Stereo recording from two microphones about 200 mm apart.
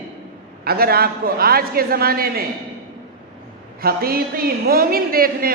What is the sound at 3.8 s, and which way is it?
A man's voice, 50° right (ahead or behind).